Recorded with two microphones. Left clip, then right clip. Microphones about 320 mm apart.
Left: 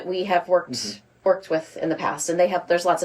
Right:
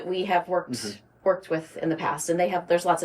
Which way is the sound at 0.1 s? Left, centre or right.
Centre.